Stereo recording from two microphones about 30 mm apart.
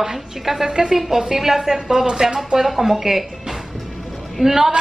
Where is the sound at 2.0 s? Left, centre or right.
Right.